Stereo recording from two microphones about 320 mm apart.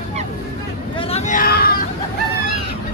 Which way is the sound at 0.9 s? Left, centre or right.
Left.